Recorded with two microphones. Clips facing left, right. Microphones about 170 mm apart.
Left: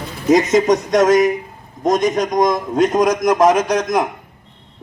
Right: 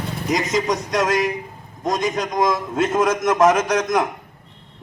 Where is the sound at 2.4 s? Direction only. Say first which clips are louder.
Left 4 dB; 40° left (ahead or behind).